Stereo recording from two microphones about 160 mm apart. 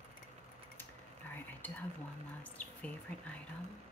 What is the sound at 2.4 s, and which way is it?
Chirp, 10° left (ahead or behind).